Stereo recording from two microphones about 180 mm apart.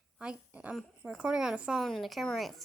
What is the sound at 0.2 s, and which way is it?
Speech, 5° right (ahead or behind).